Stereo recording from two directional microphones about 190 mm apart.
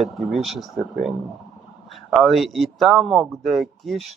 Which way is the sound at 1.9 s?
Centre (ahead or behind).